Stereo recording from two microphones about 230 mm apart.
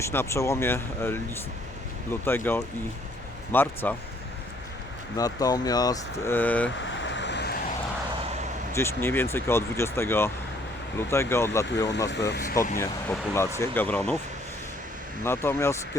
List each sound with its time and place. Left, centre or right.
0.0 s speech: centre
5.1 s speech: centre
6.8 s vehicle: left
8.7 s speech: centre
12.0 s speech: left
12.8 s speech: centre
15.2 s speech: centre